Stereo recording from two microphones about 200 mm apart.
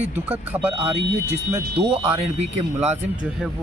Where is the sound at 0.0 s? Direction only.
10° right (ahead or behind).